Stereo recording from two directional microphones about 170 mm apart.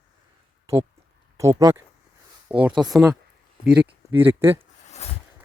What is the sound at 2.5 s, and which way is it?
Speech, 5° right (ahead or behind).